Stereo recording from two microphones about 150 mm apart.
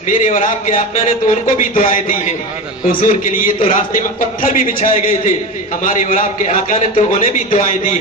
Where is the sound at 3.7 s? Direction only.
60° left (ahead or behind).